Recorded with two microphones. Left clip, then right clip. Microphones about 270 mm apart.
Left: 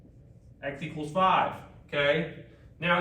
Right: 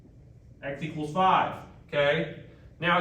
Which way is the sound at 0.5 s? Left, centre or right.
Centre.